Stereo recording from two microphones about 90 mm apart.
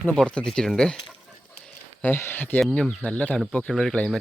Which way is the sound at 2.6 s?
10° left (ahead or behind).